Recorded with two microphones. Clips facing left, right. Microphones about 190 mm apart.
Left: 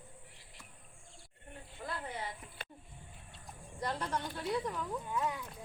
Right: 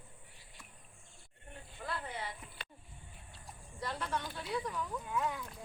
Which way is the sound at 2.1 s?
45° left (ahead or behind).